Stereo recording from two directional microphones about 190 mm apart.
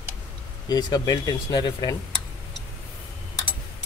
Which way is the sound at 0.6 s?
20° left (ahead or behind).